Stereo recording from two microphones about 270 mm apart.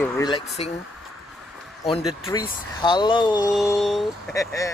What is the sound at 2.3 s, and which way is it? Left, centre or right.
Speech, centre.